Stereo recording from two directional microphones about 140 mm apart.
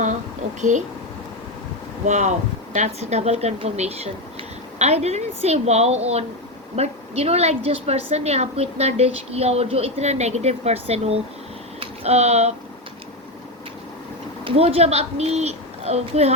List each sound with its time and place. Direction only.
2.0 s a woman's voice: 55° right (ahead or behind)
14.4 s a woman's voice: 45° right (ahead or behind)